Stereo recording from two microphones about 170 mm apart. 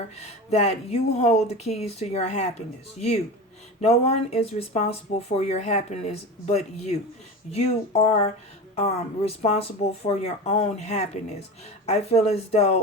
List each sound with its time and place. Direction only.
0.2 s speech: 40° left (ahead or behind)